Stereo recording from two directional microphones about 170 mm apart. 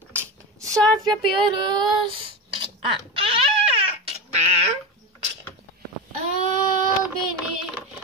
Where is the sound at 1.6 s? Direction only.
25° right (ahead or behind).